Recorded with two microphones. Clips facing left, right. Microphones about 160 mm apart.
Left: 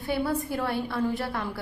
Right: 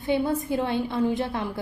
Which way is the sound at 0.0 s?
20° right (ahead or behind).